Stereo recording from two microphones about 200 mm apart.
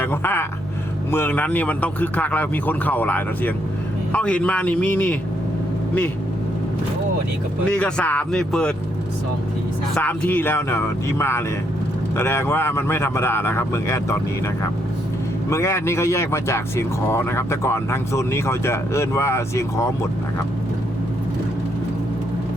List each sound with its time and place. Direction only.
0.0 s a sound: 10° left (ahead or behind)
1.1 s speech: 10° left (ahead or behind)
7.6 s speech: 5° left (ahead or behind)
9.9 s speech: 10° left (ahead or behind)
15.4 s speech: 15° left (ahead or behind)